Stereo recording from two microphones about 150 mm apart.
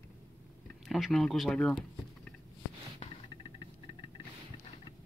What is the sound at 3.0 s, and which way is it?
Music, 30° left (ahead or behind).